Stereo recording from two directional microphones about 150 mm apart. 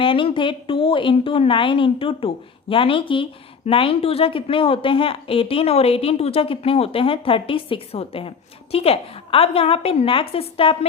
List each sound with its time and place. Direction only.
0.0 s speech: 35° left (ahead or behind)